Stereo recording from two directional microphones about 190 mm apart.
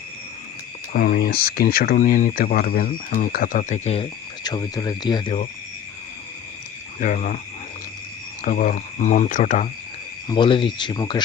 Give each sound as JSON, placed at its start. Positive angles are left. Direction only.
{"t": 0.9, "sound": "speech", "side_deg": 50}
{"t": 4.4, "sound": "speech", "side_deg": 20}
{"t": 7.0, "sound": "speech", "side_deg": 40}
{"t": 8.4, "sound": "speech", "side_deg": 45}
{"t": 10.2, "sound": "speech", "side_deg": 25}